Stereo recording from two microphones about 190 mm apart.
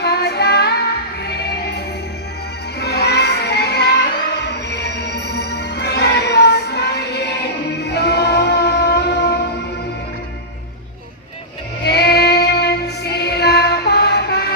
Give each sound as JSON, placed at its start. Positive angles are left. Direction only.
{"t": 0.0, "sound": "music", "side_deg": 60}
{"t": 11.9, "sound": "music", "side_deg": 55}